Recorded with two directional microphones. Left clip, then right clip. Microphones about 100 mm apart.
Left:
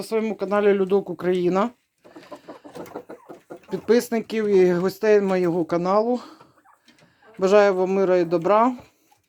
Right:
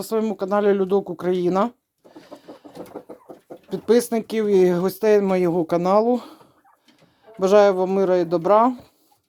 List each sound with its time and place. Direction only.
0.0 s speech: 15° right (ahead or behind)
2.1 s chicken: 10° right (ahead or behind)
3.7 s speech: 10° right (ahead or behind); by 6.4 s 35° right (ahead or behind)
7.3 s speech: 10° right (ahead or behind)